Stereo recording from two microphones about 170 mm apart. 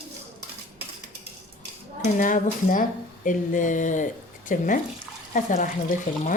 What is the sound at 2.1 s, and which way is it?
Speech, 50° left (ahead or behind).